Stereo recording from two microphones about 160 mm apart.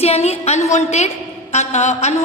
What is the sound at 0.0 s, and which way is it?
A woman's voice, 40° left (ahead or behind).